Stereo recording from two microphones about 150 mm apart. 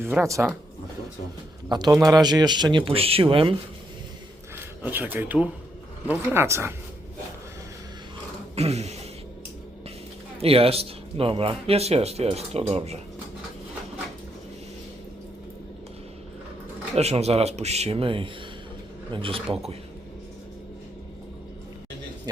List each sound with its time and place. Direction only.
0.2 s speech: 20° right (ahead or behind)
1.7 s speech: 25° right (ahead or behind)
4.5 s speech: 15° right (ahead or behind)
8.5 s a sound: 45° right (ahead or behind)
10.4 s speech: 40° right (ahead or behind)
16.9 s speech: 45° right (ahead or behind)